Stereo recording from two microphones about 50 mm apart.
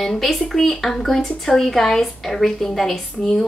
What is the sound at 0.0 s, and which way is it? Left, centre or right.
Speech, centre.